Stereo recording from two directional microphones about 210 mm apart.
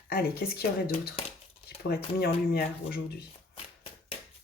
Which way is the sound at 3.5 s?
25° left (ahead or behind).